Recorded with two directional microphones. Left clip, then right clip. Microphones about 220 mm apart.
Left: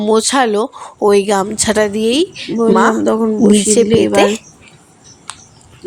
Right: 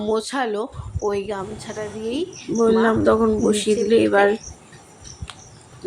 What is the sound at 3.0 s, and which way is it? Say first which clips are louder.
Speech: left 4 dB; 5° left (ahead or behind).